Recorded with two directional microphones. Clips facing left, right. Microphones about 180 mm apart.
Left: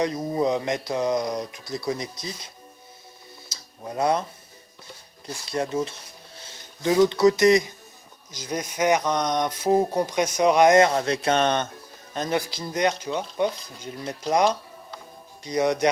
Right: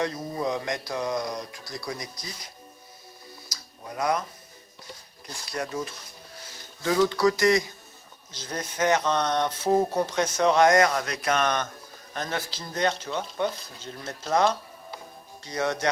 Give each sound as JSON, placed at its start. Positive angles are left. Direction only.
{"t": 0.0, "sound": "speech", "side_deg": 20}
{"t": 3.5, "sound": "a sound", "side_deg": 30}
{"t": 5.2, "sound": "speech", "side_deg": 25}
{"t": 12.1, "sound": "speech", "side_deg": 15}